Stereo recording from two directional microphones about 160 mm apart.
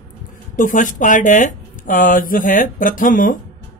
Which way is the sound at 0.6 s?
55° left (ahead or behind).